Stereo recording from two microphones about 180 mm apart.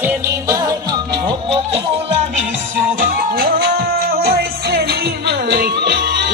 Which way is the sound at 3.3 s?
55° right (ahead or behind).